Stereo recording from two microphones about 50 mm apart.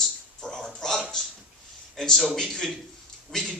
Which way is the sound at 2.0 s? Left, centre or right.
Centre.